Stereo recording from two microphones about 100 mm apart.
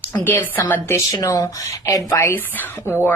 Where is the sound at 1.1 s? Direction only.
35° left (ahead or behind).